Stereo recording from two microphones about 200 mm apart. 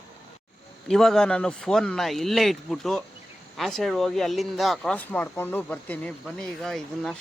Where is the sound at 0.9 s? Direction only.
Centre (ahead or behind).